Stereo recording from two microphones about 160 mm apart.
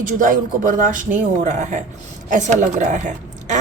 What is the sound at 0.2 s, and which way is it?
A woman's voice, 55° right (ahead or behind).